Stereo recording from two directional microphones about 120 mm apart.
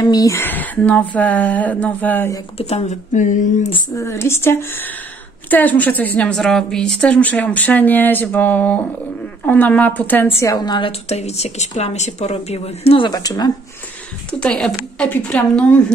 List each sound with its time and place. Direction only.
0.0 s speech: 30° left (ahead or behind)
0.4 s a woman's voice: 15° left (ahead or behind)
2.5 s speech: 60° left (ahead or behind); by 3.4 s 90° left
3.9 s a woman's voice: 20° left (ahead or behind)
10.9 s speech: 65° left (ahead or behind)
13.1 s speech: 30° left (ahead or behind)
14.4 s a woman's voice: 10° left (ahead or behind)